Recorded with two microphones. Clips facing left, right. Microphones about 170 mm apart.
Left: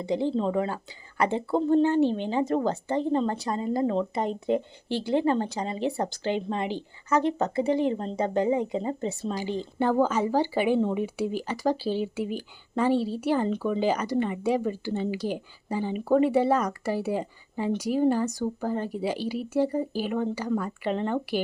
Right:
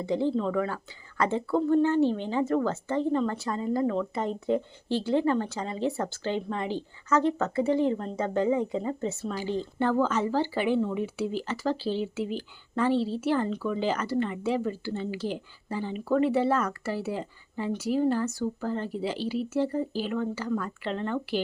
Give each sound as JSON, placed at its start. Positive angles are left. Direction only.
{"t": 0.0, "sound": "speech", "side_deg": 15}